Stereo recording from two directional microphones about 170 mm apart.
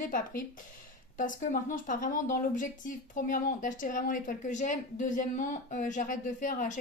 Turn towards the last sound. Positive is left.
turn(degrees=50)  # may be behind; listen again after turning